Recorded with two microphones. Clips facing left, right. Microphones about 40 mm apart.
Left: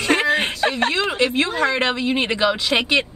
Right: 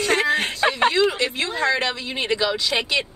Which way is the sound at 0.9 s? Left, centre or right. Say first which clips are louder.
Left 1 dB; left.